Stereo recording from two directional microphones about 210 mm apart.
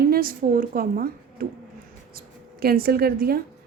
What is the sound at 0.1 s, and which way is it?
A woman's voice, 45° right (ahead or behind).